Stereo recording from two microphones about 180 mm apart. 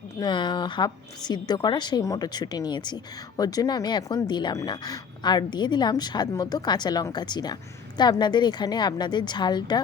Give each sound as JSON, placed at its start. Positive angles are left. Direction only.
{"t": 0.2, "sound": "a woman's voice", "side_deg": 25}